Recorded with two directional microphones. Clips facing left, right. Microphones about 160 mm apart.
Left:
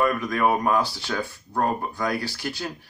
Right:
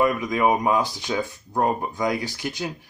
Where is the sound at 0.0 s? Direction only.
15° right (ahead or behind).